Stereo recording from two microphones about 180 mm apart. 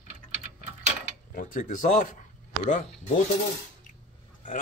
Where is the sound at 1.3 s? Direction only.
45° left (ahead or behind).